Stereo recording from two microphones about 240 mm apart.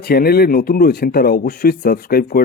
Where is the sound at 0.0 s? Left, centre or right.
Left.